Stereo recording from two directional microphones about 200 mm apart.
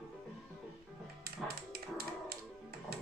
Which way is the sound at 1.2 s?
50° right (ahead or behind).